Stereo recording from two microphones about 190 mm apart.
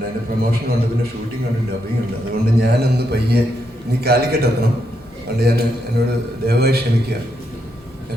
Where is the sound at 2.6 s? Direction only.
55° right (ahead or behind).